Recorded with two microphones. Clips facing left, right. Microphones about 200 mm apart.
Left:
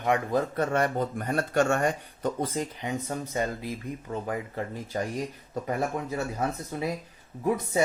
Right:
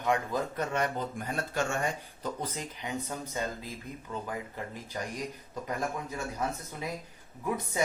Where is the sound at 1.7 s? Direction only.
50° left (ahead or behind).